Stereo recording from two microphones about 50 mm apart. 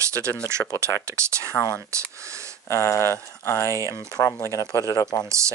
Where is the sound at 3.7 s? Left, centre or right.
Right.